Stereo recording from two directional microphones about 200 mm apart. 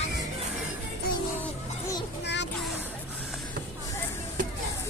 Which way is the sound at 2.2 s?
60° left (ahead or behind).